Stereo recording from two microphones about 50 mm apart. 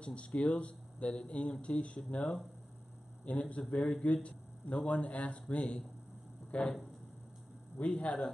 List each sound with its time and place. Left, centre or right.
0.0 s speech: left
7.8 s speech: left